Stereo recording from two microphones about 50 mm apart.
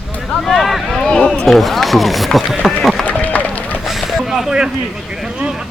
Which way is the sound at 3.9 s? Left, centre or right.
Centre.